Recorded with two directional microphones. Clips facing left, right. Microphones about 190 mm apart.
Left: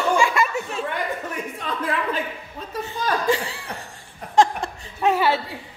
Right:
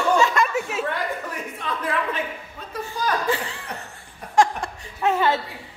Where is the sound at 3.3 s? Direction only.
10° left (ahead or behind).